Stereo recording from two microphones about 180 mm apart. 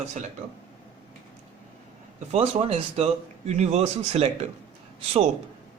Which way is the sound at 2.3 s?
35° right (ahead or behind).